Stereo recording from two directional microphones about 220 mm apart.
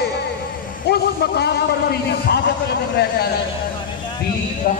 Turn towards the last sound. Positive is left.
turn(degrees=40)  # may be behind; listen again after turning